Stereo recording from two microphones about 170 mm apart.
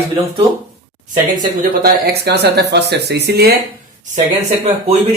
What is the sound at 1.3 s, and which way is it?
Speech, 60° right (ahead or behind).